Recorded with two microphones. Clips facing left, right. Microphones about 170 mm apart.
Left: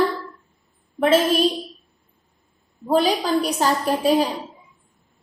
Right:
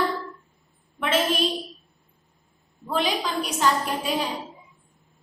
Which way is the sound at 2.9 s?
35° left (ahead or behind).